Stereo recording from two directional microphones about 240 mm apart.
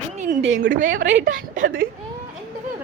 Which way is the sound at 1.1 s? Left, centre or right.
Right.